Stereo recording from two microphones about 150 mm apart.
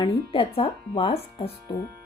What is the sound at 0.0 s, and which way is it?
Speech, 35° left (ahead or behind).